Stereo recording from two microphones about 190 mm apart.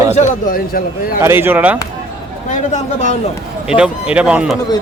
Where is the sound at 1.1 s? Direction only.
10° right (ahead or behind).